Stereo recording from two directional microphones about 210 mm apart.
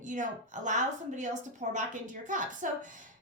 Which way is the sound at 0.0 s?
35° right (ahead or behind).